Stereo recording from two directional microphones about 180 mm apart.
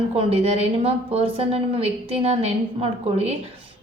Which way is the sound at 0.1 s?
35° right (ahead or behind).